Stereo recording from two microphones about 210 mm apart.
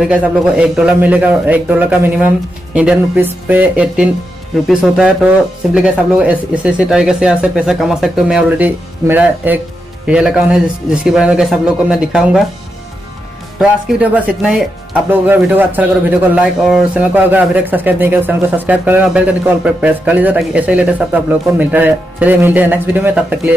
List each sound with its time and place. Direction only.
0.0 s speech: 5° right (ahead or behind)
13.6 s speech: 5° right (ahead or behind)